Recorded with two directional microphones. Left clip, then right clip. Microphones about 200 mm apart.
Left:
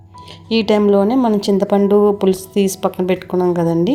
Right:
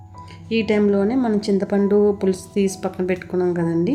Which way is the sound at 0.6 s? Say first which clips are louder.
Left 6 dB; 25° left (ahead or behind).